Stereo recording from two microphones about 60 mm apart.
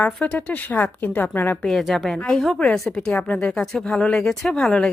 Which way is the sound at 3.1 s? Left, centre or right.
Left.